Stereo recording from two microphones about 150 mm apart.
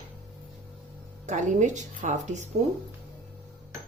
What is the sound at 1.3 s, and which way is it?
Speech, 55° right (ahead or behind).